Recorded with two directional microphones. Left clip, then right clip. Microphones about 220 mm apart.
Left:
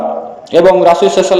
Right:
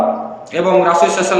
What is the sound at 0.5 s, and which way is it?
Speech, 20° left (ahead or behind).